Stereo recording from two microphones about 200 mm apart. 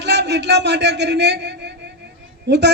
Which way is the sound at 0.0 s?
60° right (ahead or behind).